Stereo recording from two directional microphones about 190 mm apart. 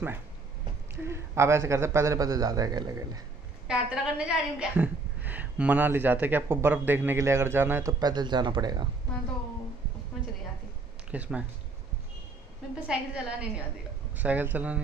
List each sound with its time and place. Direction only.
1.0 s a woman's voice: 15° right (ahead or behind)
3.6 s a woman's voice: 5° right (ahead or behind); by 8.8 s 25° right (ahead or behind)
11.1 s speech: 5° right (ahead or behind)
12.8 s a woman's voice: 5° right (ahead or behind)